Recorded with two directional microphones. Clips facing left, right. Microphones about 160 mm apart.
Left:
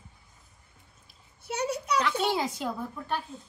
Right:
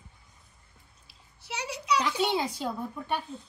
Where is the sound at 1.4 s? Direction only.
55° left (ahead or behind).